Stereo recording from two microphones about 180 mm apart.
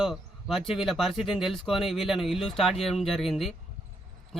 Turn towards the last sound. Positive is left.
turn(degrees=0)  # may be behind; listen again after turning